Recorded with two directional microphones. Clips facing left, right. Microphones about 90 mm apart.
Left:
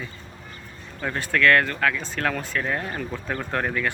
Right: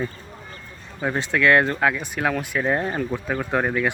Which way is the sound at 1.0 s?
15° right (ahead or behind).